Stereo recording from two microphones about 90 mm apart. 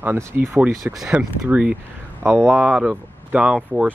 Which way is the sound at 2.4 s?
25° right (ahead or behind).